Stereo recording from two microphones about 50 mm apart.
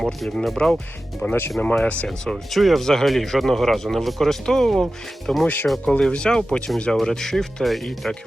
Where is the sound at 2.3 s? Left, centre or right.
Centre.